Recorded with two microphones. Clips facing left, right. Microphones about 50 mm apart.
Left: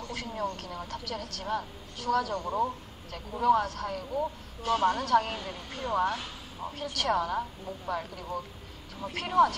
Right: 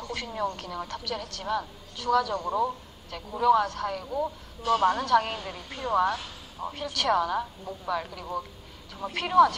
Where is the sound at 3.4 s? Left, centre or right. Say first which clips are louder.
Right 3 dB; right.